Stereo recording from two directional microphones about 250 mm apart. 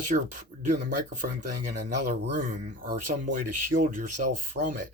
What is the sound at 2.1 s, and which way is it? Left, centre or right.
Speech, right.